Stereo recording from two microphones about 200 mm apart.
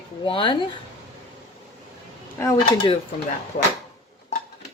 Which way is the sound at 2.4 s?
15° left (ahead or behind).